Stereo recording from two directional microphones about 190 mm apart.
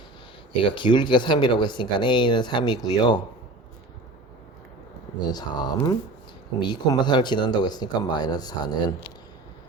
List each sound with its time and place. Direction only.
0.8 s speech: 25° left (ahead or behind)
5.3 s speech: 20° left (ahead or behind)